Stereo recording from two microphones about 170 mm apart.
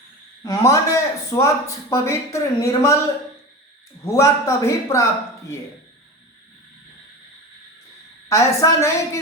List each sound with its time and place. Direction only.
0.4 s a man's voice: 20° left (ahead or behind)
4.0 s a man's voice: 15° left (ahead or behind)
8.3 s a man's voice: 15° left (ahead or behind)